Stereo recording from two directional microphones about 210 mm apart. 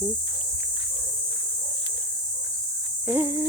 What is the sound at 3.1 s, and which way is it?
Speech, 15° right (ahead or behind).